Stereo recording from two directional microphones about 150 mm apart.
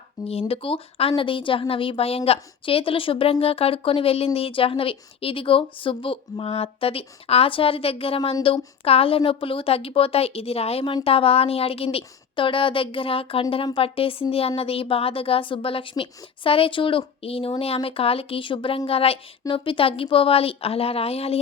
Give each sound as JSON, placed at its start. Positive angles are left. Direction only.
{"t": 0.3, "sound": "a woman's voice", "side_deg": 40}